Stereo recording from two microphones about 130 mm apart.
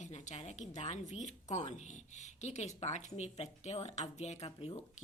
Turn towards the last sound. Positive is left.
turn(degrees=55)  # may be behind; listen again after turning